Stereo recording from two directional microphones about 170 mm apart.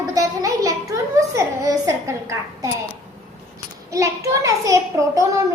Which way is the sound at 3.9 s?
20° right (ahead or behind).